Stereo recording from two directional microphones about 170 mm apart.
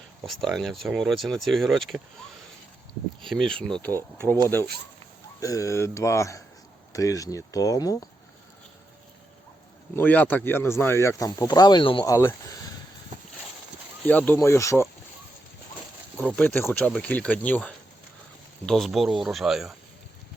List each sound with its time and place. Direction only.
0.3 s speech: centre (ahead or behind)
3.2 s speech: 5° left (ahead or behind)
5.4 s speech: 20° left (ahead or behind)
9.9 s speech: 10° left (ahead or behind)
14.1 s speech: 10° left (ahead or behind)
16.2 s speech: 10° left (ahead or behind)